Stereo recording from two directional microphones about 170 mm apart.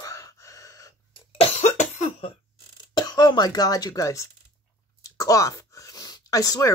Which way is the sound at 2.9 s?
25° left (ahead or behind).